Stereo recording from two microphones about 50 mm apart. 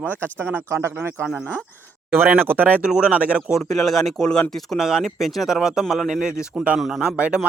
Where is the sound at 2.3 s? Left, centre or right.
Right.